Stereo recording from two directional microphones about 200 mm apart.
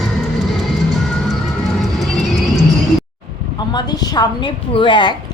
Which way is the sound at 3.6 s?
20° left (ahead or behind).